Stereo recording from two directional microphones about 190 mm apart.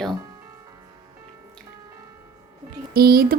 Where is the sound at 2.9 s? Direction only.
50° right (ahead or behind).